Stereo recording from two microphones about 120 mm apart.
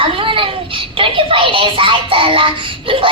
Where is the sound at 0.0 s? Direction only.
45° right (ahead or behind).